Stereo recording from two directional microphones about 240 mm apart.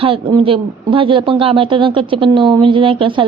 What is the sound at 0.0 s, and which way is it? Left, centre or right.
A woman's voice, right.